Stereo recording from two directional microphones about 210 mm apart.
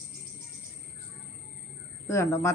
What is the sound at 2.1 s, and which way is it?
Speech, 15° left (ahead or behind).